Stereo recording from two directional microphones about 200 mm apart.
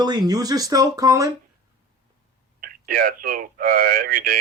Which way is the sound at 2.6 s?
45° right (ahead or behind).